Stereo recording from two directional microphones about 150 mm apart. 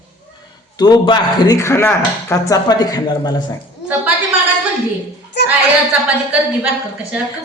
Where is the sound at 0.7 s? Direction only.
25° left (ahead or behind).